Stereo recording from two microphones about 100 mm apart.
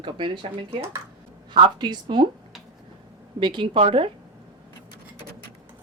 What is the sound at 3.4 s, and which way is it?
Speech, 55° right (ahead or behind).